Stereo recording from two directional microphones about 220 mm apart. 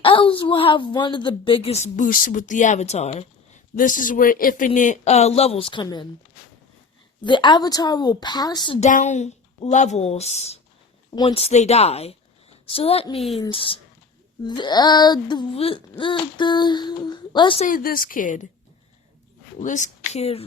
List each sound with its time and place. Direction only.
0.0 s a woman's voice: 25° left (ahead or behind)
7.3 s a woman's voice: 20° left (ahead or behind)
8.9 s a woman's voice: 35° left (ahead or behind)
13.1 s speech: centre (ahead or behind)
13.4 s a woman's voice: 25° left (ahead or behind)
17.7 s a woman's voice: 40° left (ahead or behind)
19.5 s speech: 35° left (ahead or behind)